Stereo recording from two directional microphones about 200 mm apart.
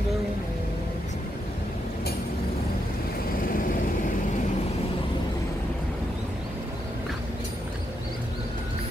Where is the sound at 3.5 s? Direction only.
45° left (ahead or behind).